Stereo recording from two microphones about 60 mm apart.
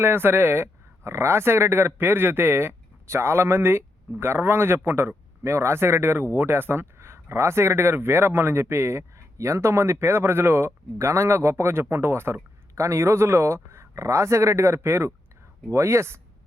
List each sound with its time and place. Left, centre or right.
0.0 s speech: right
10.9 s speech: right